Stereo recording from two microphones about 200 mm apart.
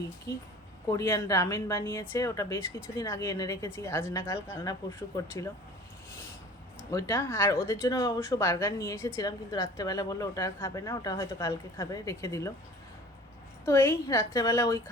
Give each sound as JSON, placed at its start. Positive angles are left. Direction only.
{"t": 0.3, "sound": "a woman's voice", "side_deg": 20}
{"t": 6.9, "sound": "a woman's voice", "side_deg": 15}
{"t": 13.7, "sound": "a woman's voice", "side_deg": 10}